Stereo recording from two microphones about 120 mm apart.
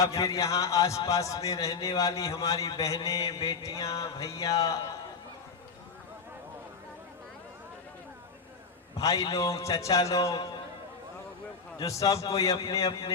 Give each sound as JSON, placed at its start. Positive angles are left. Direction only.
{"t": 0.0, "sound": "a man's voice", "side_deg": 30}
{"t": 9.0, "sound": "a man's voice", "side_deg": 30}
{"t": 11.8, "sound": "a man's voice", "side_deg": 30}